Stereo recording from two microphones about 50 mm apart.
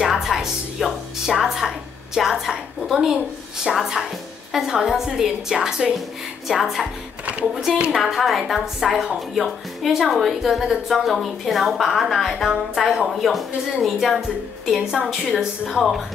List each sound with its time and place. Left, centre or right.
0.0 s music: centre
2.1 s a woman's voice: centre
7.9 s a woman's voice: centre
14.8 s a woman's voice: centre